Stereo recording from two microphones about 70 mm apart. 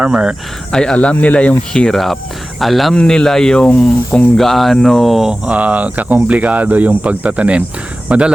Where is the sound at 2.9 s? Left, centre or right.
Centre.